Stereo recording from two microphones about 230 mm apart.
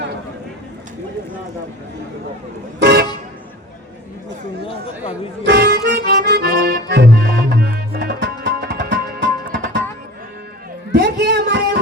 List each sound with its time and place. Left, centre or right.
2.7 s vehicle: right
5.5 s accordion: right
10.9 s a sound: right